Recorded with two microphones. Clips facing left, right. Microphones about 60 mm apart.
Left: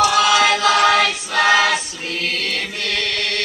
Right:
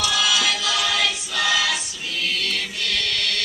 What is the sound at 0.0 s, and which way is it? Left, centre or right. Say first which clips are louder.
Choir: left 8 dB; left.